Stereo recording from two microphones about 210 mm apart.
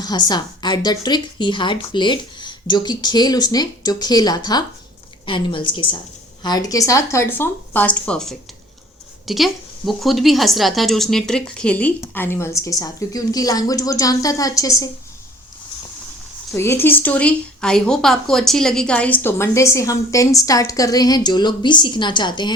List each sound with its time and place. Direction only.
0.0 s a woman's voice: 20° left (ahead or behind)
16.5 s a woman's voice: 10° left (ahead or behind)